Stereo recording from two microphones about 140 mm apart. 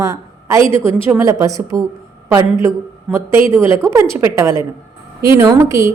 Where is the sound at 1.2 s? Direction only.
25° right (ahead or behind).